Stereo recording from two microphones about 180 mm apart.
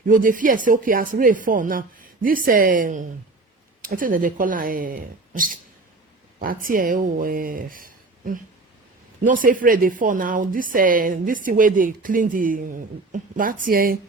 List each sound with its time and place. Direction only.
0.1 s a woman's voice: 45° right (ahead or behind)